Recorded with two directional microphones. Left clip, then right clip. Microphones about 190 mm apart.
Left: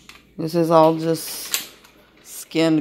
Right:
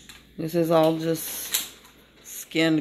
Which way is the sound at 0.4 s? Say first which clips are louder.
Left 6 dB; 15° left (ahead or behind).